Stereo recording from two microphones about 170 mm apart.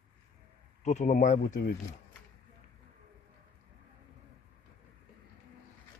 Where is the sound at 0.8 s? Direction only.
45° left (ahead or behind).